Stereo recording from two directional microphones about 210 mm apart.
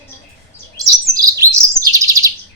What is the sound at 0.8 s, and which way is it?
Chirp, 15° right (ahead or behind).